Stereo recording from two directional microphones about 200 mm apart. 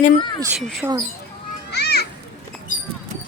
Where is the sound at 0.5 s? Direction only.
Centre (ahead or behind).